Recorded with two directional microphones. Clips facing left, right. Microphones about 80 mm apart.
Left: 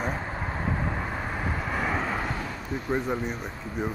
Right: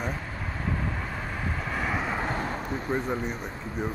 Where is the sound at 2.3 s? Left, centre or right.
Right.